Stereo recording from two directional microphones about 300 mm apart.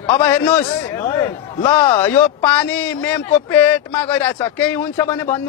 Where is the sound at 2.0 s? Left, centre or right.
Centre.